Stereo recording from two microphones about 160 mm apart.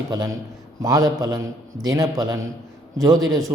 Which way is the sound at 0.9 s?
20° right (ahead or behind).